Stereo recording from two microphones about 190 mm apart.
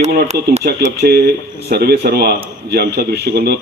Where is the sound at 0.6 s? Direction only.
55° right (ahead or behind).